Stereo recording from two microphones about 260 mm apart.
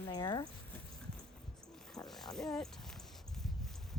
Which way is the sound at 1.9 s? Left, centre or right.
Centre.